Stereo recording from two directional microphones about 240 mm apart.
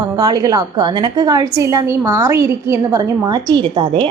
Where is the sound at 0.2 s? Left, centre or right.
Centre.